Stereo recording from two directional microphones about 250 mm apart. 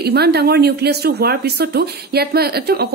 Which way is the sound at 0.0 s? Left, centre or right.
Right.